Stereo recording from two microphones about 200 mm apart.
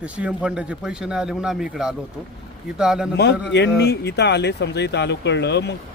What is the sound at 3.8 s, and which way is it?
A man's voice, 55° left (ahead or behind).